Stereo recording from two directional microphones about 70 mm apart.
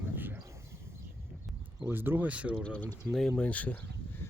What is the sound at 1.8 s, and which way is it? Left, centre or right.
Speech, right.